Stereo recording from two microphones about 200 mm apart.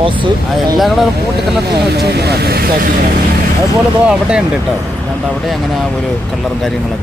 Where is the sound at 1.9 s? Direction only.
55° right (ahead or behind).